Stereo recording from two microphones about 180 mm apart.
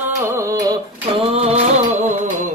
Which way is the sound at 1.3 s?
35° right (ahead or behind).